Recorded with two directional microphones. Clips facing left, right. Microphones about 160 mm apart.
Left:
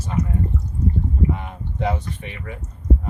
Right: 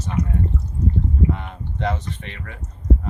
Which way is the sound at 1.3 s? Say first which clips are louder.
Left 1 dB; 10° left (ahead or behind).